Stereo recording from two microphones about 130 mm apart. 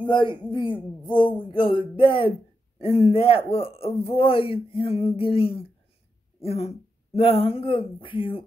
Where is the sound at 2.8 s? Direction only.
50° left (ahead or behind).